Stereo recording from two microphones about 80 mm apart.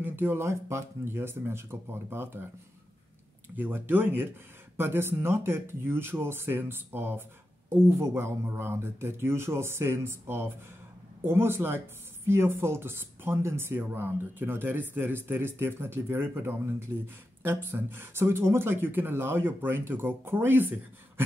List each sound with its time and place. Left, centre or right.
0.0 s speech: right
3.4 s speech: right